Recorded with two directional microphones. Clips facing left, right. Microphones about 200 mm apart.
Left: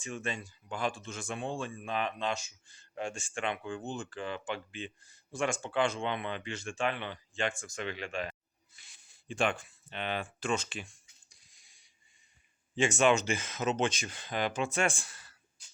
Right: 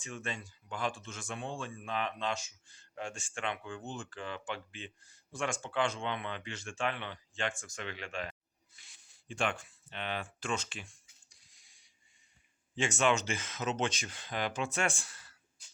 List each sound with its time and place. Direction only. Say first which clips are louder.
0.1 s speech: left 3 dB; 10° left (ahead or behind)
12.7 s speech: left 4 dB; 10° left (ahead or behind)